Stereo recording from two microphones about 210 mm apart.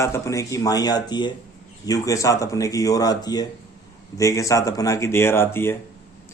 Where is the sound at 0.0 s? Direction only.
15° left (ahead or behind).